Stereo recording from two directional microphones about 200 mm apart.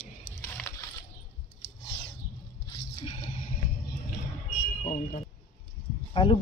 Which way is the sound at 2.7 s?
30° left (ahead or behind).